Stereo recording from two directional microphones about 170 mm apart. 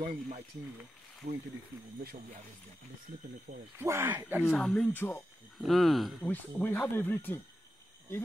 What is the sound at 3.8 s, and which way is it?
Speech, 15° right (ahead or behind).